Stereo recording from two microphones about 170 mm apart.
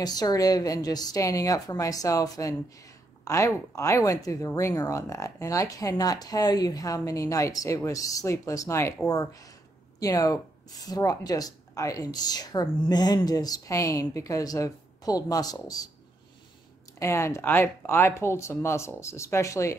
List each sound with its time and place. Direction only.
0.0 s speech: 20° left (ahead or behind)
17.0 s speech: 15° left (ahead or behind)